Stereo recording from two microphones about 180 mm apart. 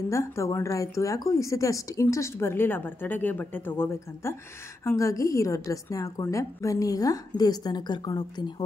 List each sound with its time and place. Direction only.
0.1 s a woman's voice: 15° left (ahead or behind)